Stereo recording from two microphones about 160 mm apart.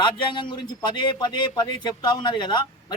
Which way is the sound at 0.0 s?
30° left (ahead or behind).